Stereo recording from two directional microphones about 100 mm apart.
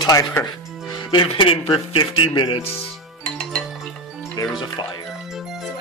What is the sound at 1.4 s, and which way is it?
Speech, 60° left (ahead or behind).